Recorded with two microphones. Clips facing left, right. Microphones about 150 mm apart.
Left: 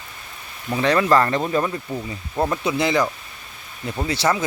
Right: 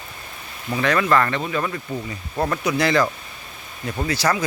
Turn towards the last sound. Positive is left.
turn(degrees=25)  # may be behind; listen again after turning